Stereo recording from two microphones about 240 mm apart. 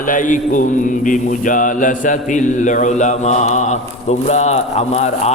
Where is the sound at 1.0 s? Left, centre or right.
Left.